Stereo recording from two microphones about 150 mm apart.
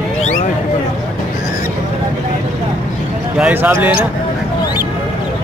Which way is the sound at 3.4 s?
10° right (ahead or behind).